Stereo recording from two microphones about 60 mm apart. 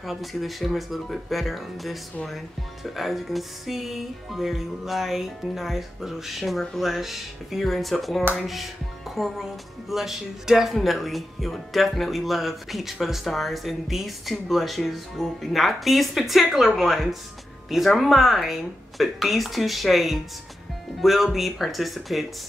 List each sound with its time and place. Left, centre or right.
0.0 s speech: centre